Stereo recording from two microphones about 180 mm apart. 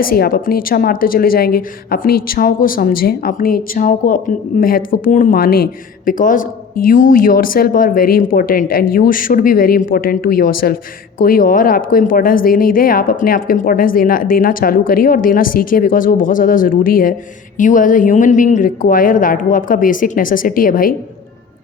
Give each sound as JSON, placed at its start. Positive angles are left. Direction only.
{"t": 0.0, "sound": "speech", "side_deg": 55}